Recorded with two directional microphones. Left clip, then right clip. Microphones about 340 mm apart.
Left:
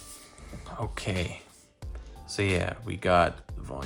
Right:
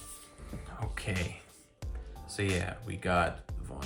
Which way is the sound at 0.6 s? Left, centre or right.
Centre.